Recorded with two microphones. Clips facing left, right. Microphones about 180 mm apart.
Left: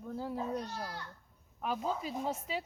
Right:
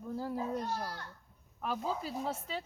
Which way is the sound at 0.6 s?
50° right (ahead or behind).